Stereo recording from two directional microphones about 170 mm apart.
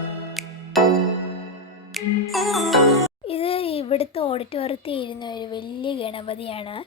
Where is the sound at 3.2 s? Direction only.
35° left (ahead or behind).